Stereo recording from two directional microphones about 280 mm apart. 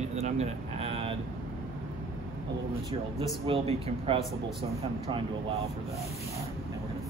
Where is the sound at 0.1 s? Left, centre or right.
Right.